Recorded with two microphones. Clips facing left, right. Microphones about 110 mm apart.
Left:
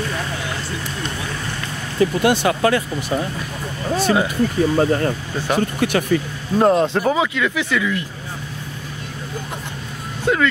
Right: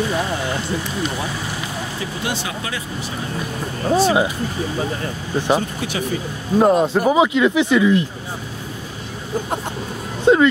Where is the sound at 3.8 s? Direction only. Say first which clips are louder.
Right 2 dB; 20° right (ahead or behind).